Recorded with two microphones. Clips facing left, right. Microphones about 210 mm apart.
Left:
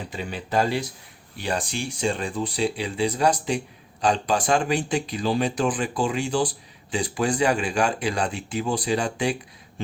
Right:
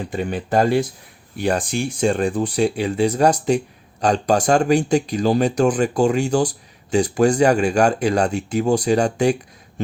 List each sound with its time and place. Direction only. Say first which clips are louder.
0.1 s speech: right 6 dB; 50° right (ahead or behind)